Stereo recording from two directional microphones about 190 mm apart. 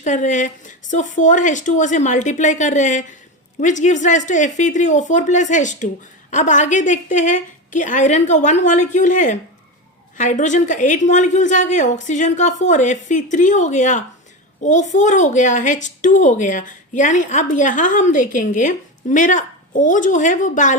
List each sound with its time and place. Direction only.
0.0 s a woman's voice: 40° left (ahead or behind)